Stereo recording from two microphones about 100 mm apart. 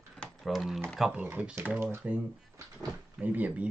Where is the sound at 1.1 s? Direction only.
20° right (ahead or behind).